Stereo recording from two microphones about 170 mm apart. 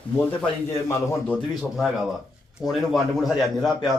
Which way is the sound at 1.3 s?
Centre (ahead or behind).